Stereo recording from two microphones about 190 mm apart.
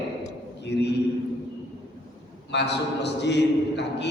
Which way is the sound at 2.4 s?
65° left (ahead or behind).